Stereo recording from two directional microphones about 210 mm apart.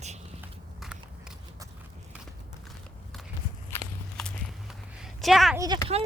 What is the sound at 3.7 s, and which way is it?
Walk, 10° left (ahead or behind).